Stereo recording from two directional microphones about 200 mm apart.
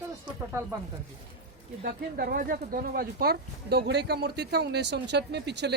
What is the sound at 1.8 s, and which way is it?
Speech, 50° right (ahead or behind).